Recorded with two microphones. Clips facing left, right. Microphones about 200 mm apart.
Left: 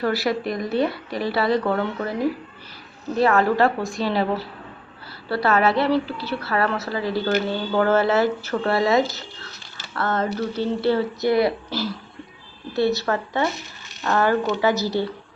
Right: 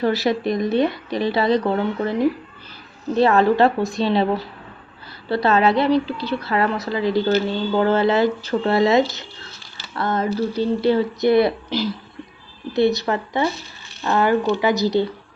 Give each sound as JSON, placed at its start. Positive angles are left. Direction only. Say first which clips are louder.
{"t": 0.0, "sound": "speech", "louder": "right 3 dB", "side_deg": -20}
{"t": 3.2, "sound": "speech", "louder": "right 3 dB", "side_deg": -25}
{"t": 5.3, "sound": "a woman's voice", "louder": "right 2 dB", "side_deg": -20}